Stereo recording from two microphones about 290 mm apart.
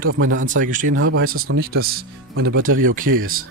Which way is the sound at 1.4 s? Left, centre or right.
Right.